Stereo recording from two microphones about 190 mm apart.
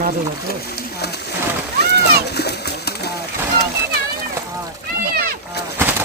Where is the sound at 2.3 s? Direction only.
60° left (ahead or behind).